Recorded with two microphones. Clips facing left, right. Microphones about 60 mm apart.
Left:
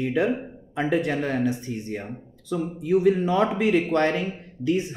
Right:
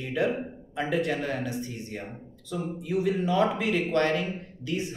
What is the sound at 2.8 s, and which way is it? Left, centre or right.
Speech, left.